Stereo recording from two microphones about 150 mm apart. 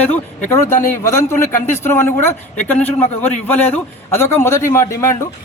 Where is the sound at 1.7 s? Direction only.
15° left (ahead or behind).